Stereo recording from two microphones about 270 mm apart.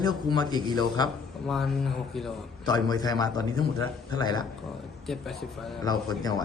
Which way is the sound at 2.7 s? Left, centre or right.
Centre.